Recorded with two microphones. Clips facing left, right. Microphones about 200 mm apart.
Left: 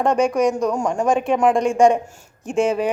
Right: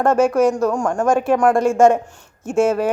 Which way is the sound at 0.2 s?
5° right (ahead or behind).